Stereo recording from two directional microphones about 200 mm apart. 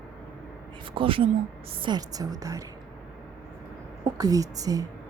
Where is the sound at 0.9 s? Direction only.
25° right (ahead or behind).